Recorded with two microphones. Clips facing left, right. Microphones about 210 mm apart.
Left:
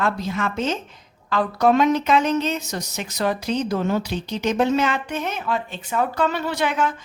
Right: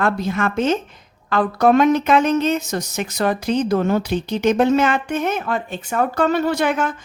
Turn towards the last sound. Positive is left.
turn(degrees=-50)  # may be behind; listen again after turning